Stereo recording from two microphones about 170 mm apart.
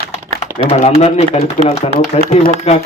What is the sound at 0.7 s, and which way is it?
A man's voice, 40° left (ahead or behind).